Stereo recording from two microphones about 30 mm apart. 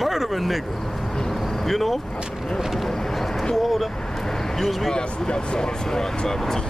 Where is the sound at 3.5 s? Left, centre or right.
Centre.